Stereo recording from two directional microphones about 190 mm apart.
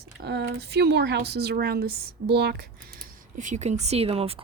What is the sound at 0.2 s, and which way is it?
Speech, 60° right (ahead or behind).